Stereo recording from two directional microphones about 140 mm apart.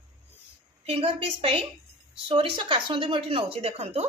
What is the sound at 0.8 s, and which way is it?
Speech, 45° right (ahead or behind).